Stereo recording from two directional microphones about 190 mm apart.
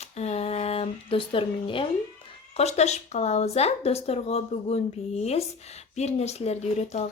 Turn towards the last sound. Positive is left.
turn(degrees=35)  # may be behind; listen again after turning